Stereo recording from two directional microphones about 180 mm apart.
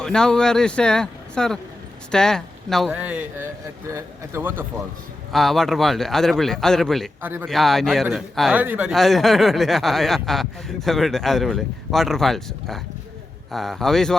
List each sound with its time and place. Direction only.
0.0 s a man's voice: 5° left (ahead or behind); by 4.6 s 15° right (ahead or behind)
5.3 s speech: centre (ahead or behind)
7.2 s a man's voice: 10° right (ahead or behind)
7.4 s speech: centre (ahead or behind)